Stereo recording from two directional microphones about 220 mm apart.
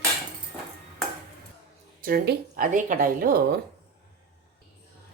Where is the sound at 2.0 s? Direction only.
40° right (ahead or behind).